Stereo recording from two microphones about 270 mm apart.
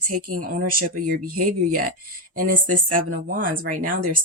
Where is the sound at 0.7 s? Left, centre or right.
Right.